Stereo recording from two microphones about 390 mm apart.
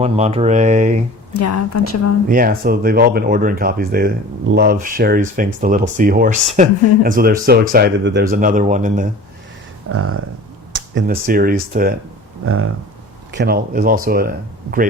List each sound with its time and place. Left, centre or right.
0.0 s speech: centre
1.3 s a woman's voice: left
2.2 s speech: right
9.9 s speech: right
10.9 s speech: right
13.3 s speech: right